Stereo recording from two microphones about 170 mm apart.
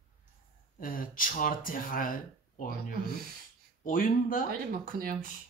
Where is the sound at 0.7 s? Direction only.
55° left (ahead or behind).